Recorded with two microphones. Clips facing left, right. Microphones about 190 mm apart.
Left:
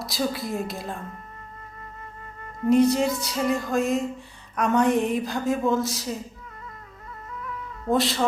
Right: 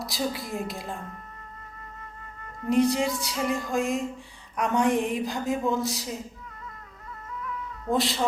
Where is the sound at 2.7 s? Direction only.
15° left (ahead or behind).